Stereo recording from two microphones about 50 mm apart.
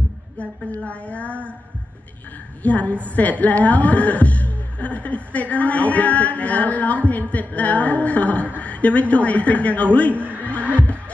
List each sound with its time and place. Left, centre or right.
0.4 s a woman's voice: left
2.6 s a woman's voice: left
10.4 s neigh: left